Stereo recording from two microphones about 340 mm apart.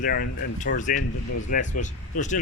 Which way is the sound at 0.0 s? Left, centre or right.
Left.